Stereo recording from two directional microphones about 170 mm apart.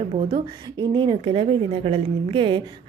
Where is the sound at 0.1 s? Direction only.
30° right (ahead or behind).